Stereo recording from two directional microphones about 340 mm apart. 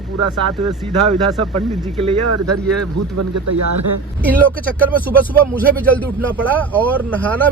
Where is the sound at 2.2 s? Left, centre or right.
Right.